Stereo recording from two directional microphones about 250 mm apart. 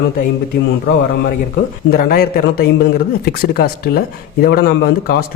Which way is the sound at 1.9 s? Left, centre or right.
Left.